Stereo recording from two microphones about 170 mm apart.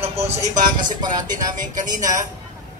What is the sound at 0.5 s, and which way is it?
Speech, 50° right (ahead or behind).